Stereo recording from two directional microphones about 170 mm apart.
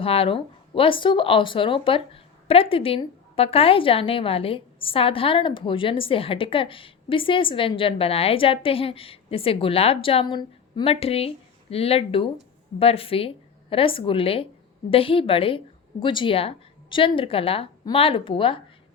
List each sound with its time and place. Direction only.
0.0 s speech: 35° left (ahead or behind)